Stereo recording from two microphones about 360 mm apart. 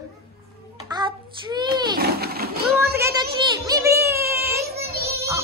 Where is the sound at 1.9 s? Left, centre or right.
Right.